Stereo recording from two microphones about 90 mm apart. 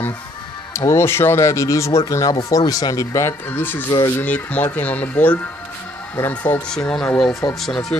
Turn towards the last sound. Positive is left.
turn(degrees=5)  # may be behind; listen again after turning